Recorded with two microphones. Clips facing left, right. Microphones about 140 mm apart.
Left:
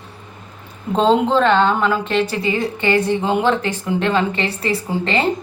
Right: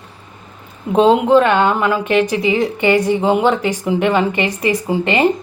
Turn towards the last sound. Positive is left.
turn(degrees=-15)  # may be behind; listen again after turning